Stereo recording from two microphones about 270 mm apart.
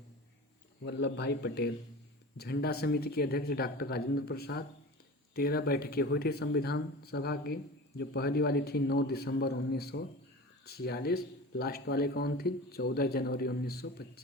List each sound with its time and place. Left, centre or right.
0.9 s speech: left